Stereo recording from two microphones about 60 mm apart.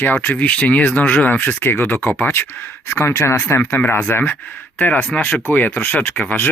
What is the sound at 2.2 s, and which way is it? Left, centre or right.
Speech, left.